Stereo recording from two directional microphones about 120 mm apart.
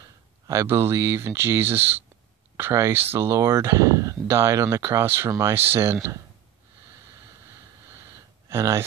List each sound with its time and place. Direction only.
0.0 s speech: 25° right (ahead or behind)
8.5 s speech: 25° right (ahead or behind)